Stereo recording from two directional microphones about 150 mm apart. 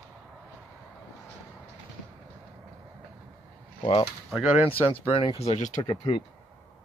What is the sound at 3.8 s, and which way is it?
Mechanisms, 35° left (ahead or behind).